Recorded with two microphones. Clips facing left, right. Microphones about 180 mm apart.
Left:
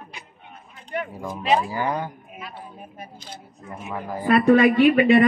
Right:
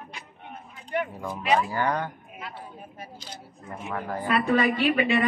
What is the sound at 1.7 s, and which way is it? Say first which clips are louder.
Speech: left 1 dB; 10° left (ahead or behind).